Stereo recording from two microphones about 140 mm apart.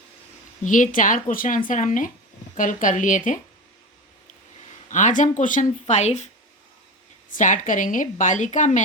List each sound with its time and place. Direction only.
0.6 s a woman's voice: 65° left (ahead or behind)
4.9 s a woman's voice: 60° left (ahead or behind)
5.8 s speech: 50° left (ahead or behind)
7.3 s a woman's voice: 65° left (ahead or behind)